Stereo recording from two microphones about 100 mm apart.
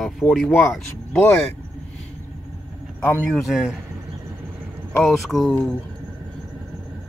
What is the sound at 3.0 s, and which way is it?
Speech, 20° left (ahead or behind).